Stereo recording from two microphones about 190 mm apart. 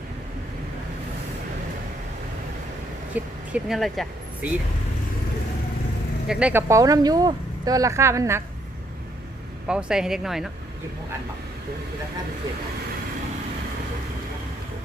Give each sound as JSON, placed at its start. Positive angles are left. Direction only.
{"t": 3.2, "sound": "speech", "side_deg": -5}
{"t": 6.2, "sound": "speech", "side_deg": -5}
{"t": 9.6, "sound": "speech", "side_deg": -5}